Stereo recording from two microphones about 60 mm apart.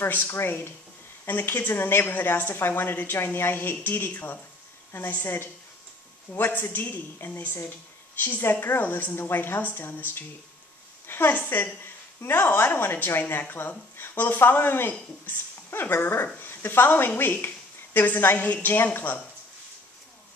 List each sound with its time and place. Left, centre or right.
0.3 s a woman's voice: left